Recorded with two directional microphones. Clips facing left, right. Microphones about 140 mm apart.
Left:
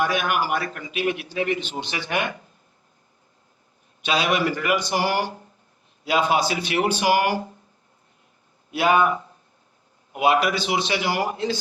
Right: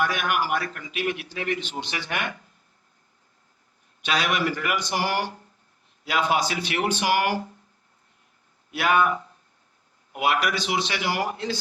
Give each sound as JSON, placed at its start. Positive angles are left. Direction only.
{"t": 0.0, "sound": "a man's voice", "side_deg": 25}
{"t": 4.0, "sound": "a man's voice", "side_deg": 25}
{"t": 6.1, "sound": "a man's voice", "side_deg": 25}
{"t": 6.7, "sound": "speech", "side_deg": 10}
{"t": 8.7, "sound": "a man's voice", "side_deg": 25}